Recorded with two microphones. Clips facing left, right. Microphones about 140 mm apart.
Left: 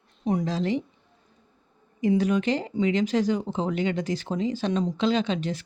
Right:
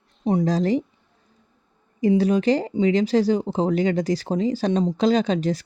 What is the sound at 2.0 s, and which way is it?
Speech, 35° right (ahead or behind).